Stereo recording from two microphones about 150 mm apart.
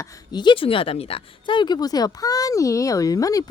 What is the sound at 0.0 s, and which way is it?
Speech, 30° left (ahead or behind).